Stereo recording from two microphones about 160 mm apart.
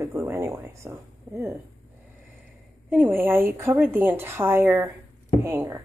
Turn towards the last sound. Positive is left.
turn(degrees=-15)  # may be behind; listen again after turning